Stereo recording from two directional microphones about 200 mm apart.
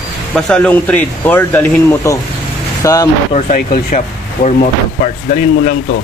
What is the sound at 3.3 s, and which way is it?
Speech, 35° left (ahead or behind).